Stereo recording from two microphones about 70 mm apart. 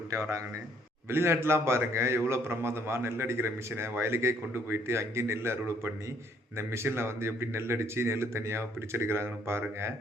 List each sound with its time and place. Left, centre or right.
0.1 s a man's voice: right
1.1 s a man's voice: right